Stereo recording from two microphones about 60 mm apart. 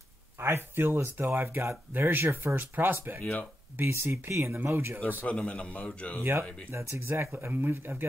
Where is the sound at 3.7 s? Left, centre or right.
Right.